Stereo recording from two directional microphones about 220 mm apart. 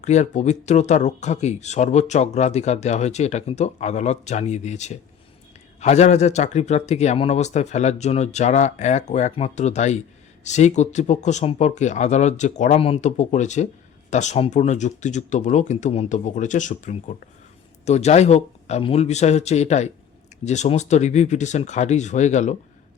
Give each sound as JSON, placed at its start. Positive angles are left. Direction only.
{"t": 0.0, "sound": "speech", "side_deg": 30}